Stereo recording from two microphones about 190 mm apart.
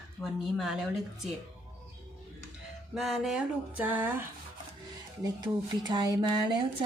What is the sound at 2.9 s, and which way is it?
A woman's voice, centre (ahead or behind).